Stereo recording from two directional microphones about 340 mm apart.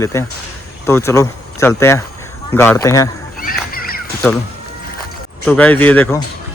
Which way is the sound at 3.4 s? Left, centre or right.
Left.